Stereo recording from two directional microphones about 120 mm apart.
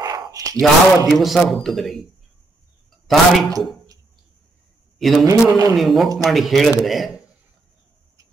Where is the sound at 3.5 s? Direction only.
30° right (ahead or behind).